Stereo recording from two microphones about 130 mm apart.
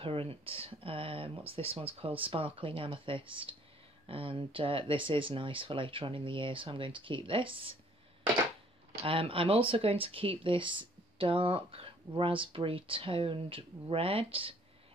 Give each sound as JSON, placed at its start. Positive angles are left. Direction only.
{"t": 0.0, "sound": "speech", "side_deg": -45}
{"t": 9.0, "sound": "speech", "side_deg": -45}